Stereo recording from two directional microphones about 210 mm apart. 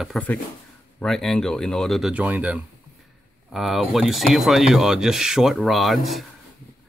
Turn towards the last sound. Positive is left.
turn(degrees=0)  # may be behind; listen again after turning